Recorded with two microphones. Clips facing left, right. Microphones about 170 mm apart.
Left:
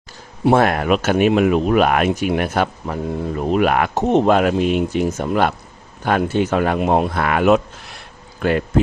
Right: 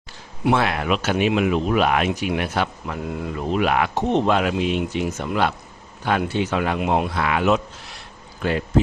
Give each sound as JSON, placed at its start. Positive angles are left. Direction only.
{"t": 0.5, "sound": "speech", "side_deg": 45}
{"t": 3.5, "sound": "speech", "side_deg": 50}